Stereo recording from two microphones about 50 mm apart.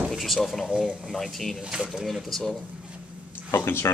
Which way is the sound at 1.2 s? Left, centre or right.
Centre.